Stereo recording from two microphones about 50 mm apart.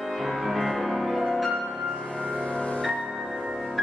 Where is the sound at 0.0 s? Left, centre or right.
Centre.